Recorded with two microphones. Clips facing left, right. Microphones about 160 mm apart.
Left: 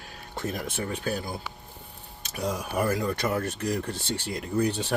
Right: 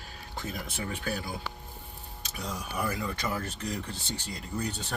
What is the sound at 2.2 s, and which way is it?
Speech, 50° left (ahead or behind).